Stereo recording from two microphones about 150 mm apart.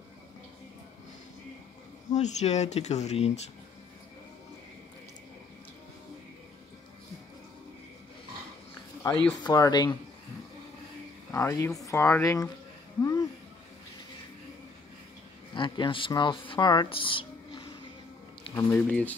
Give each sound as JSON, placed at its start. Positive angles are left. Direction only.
{"t": 2.1, "sound": "speech", "side_deg": 50}
{"t": 9.4, "sound": "speech", "side_deg": 25}
{"t": 11.3, "sound": "speech", "side_deg": 20}
{"t": 13.0, "sound": "a sound", "side_deg": 25}
{"t": 15.5, "sound": "speech", "side_deg": 30}
{"t": 18.5, "sound": "speech", "side_deg": 15}